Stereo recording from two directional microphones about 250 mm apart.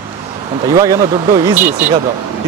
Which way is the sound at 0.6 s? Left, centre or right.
Centre.